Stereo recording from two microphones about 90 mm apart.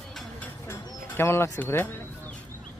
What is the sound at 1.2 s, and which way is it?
A man's voice, 30° left (ahead or behind).